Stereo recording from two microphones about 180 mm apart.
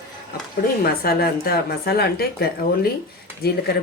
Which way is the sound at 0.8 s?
55° left (ahead or behind).